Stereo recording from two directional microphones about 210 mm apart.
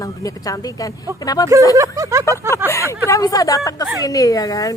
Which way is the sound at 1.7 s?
15° right (ahead or behind).